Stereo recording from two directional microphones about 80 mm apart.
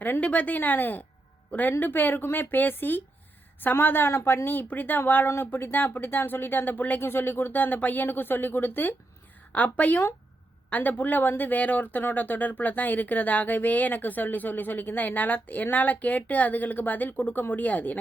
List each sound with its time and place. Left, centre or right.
0.0 s a woman's voice: centre